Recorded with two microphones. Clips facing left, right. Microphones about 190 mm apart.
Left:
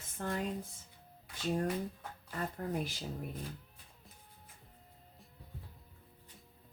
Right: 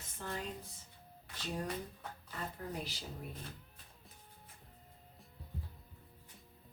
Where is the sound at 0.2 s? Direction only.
55° left (ahead or behind).